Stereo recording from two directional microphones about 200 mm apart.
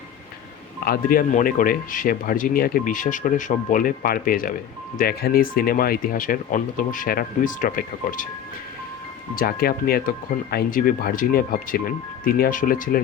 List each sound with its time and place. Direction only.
0.9 s speech: 45° left (ahead or behind)
9.3 s speech: 45° left (ahead or behind)